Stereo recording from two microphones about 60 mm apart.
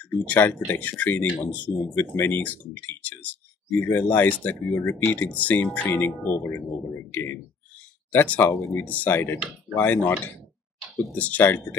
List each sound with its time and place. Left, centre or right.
0.2 s speech: left
2.0 s speech: left